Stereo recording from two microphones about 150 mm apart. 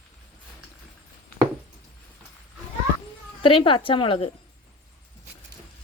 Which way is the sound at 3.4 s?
35° left (ahead or behind).